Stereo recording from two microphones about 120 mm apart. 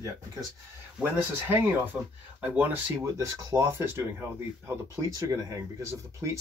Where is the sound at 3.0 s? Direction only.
25° right (ahead or behind).